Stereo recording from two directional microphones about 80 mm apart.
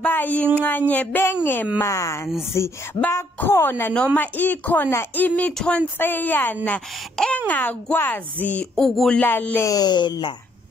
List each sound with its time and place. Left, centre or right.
0.0 s a sound: left
0.6 s speech: left
1.8 s speech: left
3.9 s speech: centre
4.2 s speech: left
5.9 s speech: left
8.7 s speech: centre
9.2 s speech: left
9.6 s speech: left